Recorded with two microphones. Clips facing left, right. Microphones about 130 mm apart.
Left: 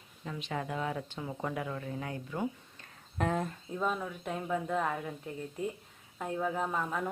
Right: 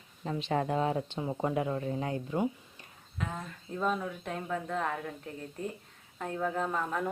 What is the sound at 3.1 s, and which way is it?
Speech, 55° left (ahead or behind).